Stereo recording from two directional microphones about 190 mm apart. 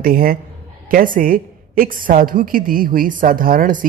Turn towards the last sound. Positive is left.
turn(degrees=-45)  # may be behind; listen again after turning